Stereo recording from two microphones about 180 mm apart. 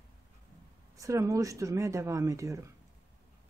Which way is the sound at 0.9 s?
15° right (ahead or behind).